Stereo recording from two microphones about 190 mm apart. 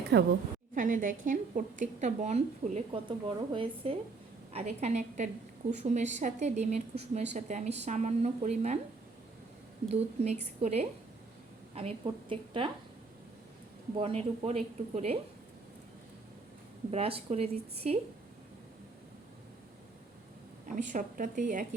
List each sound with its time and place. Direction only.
0.1 s a woman's voice: 60° right (ahead or behind)
0.8 s a woman's voice: 45° right (ahead or behind)
9.9 s a woman's voice: 35° right (ahead or behind)
14.0 s a woman's voice: 30° right (ahead or behind)
16.9 s a woman's voice: 30° right (ahead or behind)
20.7 s a woman's voice: 40° right (ahead or behind)